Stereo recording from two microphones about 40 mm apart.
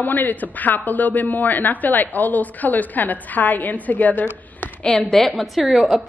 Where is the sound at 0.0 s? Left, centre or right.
Left.